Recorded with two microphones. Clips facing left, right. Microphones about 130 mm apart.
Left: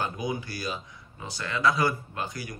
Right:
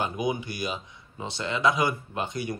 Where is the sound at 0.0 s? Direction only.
20° right (ahead or behind).